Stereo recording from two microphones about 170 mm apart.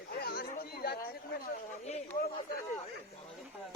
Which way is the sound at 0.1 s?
65° left (ahead or behind).